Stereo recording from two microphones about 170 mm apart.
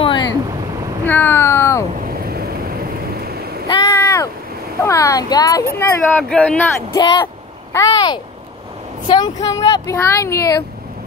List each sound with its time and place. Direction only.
0.0 s a sound: 25° left (ahead or behind)
1.0 s a sound: 10° left (ahead or behind)
2.0 s vehicle: 60° right (ahead or behind)
3.6 s vehicle: 25° left (ahead or behind)
4.8 s speech: 20° left (ahead or behind)
7.0 s speech: 25° left (ahead or behind)